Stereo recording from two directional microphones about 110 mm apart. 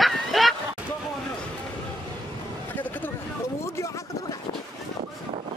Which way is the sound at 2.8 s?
15° left (ahead or behind).